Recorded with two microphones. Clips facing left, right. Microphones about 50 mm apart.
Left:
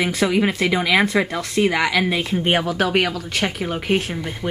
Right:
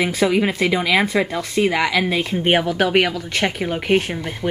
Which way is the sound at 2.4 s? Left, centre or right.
Right.